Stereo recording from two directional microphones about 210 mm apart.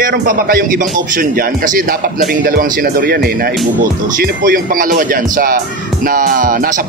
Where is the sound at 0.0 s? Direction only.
45° right (ahead or behind).